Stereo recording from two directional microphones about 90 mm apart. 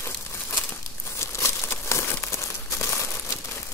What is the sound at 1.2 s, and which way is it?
Crumpling, 30° left (ahead or behind).